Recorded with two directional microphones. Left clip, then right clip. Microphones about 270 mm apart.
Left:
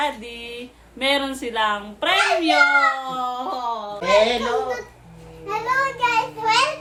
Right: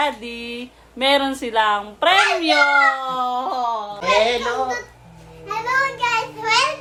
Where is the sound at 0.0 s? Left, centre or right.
Centre.